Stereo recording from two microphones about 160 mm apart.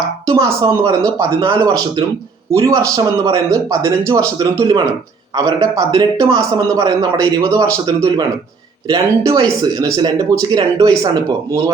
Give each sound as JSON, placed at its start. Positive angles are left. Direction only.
{"t": 0.3, "sound": "a man's voice", "side_deg": -20}